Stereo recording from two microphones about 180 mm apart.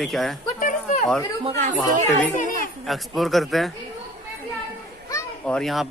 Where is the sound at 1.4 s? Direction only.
35° right (ahead or behind).